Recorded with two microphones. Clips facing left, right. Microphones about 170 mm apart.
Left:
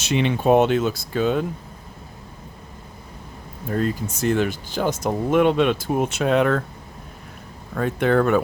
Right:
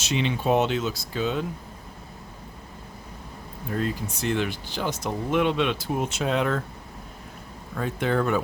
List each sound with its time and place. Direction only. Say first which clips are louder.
0.0 s speech: left 5 dB; 55° left (ahead or behind)
3.7 s speech: left 5 dB; 45° left (ahead or behind)
7.8 s speech: left 6 dB; 60° left (ahead or behind)